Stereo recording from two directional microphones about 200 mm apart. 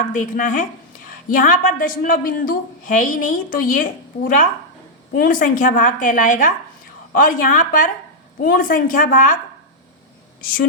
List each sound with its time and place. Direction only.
0.0 s a woman's voice: 40° left (ahead or behind)